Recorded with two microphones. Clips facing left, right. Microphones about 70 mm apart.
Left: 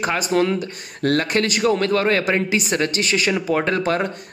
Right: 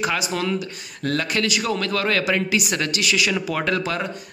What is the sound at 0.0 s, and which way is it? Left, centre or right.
Speech, left.